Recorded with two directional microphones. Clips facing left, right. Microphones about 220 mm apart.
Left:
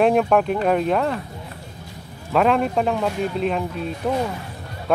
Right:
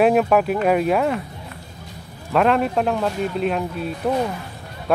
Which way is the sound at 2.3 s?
Centre (ahead or behind).